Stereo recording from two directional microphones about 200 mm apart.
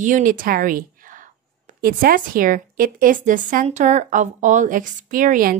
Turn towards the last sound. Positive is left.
turn(degrees=-45)  # may be behind; listen again after turning